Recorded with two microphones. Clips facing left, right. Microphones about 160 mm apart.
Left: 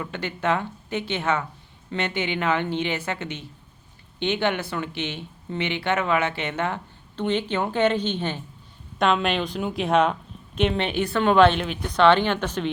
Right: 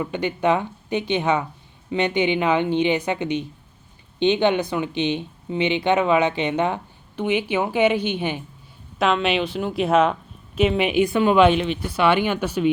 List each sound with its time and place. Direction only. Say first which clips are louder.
0.0 s a woman's voice: right 6 dB; 15° right (ahead or behind)